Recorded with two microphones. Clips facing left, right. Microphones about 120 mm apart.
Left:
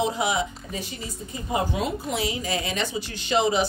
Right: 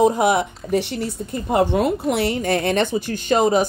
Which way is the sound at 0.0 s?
50° right (ahead or behind).